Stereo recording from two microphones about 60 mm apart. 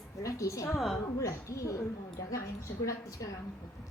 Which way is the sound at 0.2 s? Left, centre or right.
Left.